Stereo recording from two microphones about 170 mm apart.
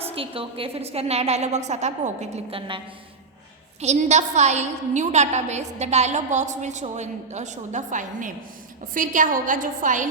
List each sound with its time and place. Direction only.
0.1 s a woman's voice: 35° right (ahead or behind)
3.8 s a woman's voice: 40° right (ahead or behind)